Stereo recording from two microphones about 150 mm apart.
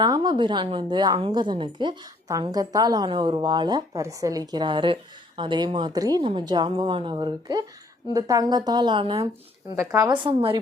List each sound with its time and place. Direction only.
0.0 s a woman's voice: 25° right (ahead or behind)
9.7 s a woman's voice: 20° right (ahead or behind)
10.1 s a woman's voice: 35° right (ahead or behind)